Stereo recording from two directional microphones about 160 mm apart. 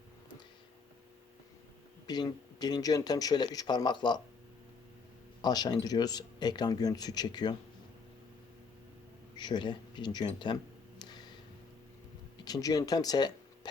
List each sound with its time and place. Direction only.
2.0 s speech: 25° left (ahead or behind)
5.4 s speech: 25° left (ahead or behind)
9.3 s a sound: 30° left (ahead or behind)
12.5 s speech: 20° left (ahead or behind)